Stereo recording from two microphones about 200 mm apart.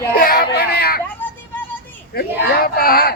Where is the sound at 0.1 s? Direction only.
45° left (ahead or behind).